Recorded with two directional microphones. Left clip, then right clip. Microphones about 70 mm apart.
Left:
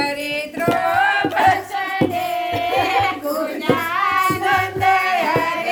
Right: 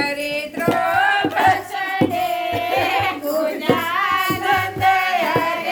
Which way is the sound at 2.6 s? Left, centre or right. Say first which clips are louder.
Left 1 dB; right.